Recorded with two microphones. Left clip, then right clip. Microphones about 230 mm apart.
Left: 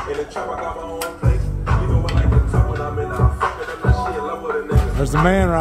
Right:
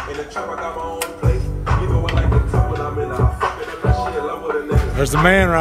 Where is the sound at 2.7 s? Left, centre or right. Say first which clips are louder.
Right 1 dB; right.